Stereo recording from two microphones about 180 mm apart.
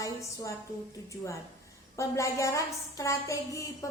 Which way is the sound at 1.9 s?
15° left (ahead or behind).